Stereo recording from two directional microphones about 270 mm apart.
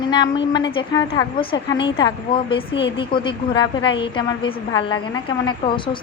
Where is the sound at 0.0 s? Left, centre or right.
Centre.